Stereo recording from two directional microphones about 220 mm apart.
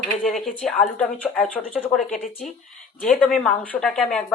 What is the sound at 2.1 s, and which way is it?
Speech, 30° left (ahead or behind).